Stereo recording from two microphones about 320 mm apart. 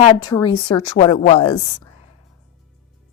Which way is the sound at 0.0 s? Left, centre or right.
Centre.